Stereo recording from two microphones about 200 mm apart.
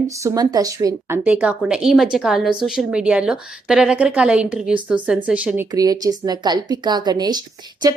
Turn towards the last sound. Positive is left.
turn(degrees=-20)  # may be behind; listen again after turning